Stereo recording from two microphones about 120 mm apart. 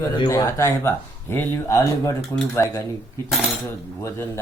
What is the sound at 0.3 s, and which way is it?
Speech, 25° left (ahead or behind).